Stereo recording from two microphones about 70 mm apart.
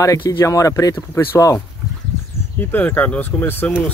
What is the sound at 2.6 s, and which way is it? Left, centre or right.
Speech, left.